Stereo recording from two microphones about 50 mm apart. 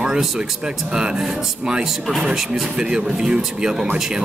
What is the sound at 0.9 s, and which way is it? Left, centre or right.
Speech, centre.